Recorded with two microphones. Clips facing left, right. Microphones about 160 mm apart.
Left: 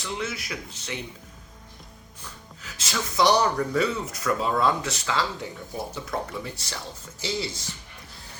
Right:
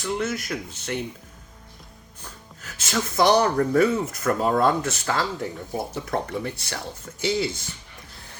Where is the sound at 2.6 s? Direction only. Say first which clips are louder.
Right 4 dB; 50° right (ahead or behind).